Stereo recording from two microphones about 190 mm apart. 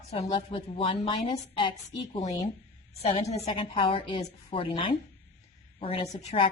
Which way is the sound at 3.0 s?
35° left (ahead or behind).